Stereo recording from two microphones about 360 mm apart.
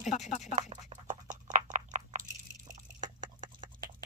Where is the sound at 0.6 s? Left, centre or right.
Centre.